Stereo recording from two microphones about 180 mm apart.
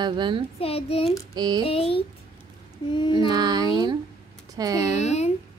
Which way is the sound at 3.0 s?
25° left (ahead or behind).